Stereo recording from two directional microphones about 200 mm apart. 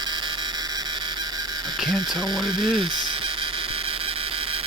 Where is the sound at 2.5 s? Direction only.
25° right (ahead or behind).